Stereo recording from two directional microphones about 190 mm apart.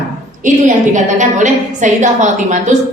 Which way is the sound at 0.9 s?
40° right (ahead or behind).